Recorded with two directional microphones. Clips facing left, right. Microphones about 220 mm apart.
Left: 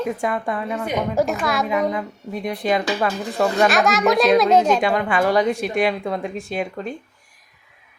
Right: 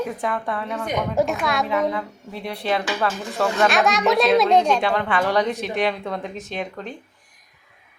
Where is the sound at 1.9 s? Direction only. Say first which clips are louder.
Left 3 dB; 15° left (ahead or behind).